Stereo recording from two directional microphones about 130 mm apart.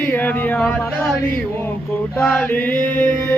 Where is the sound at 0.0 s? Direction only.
15° left (ahead or behind).